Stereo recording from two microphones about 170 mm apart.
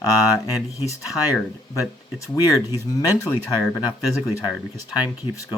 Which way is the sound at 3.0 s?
20° left (ahead or behind).